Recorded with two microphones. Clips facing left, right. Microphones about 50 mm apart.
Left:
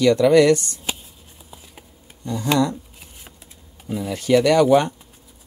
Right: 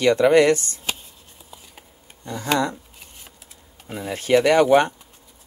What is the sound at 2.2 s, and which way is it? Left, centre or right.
Speech, right.